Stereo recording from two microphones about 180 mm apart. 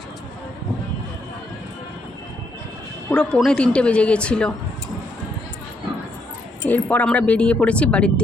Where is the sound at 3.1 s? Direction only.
5° left (ahead or behind).